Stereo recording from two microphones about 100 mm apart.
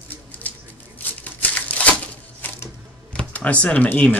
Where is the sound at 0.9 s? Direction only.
15° left (ahead or behind).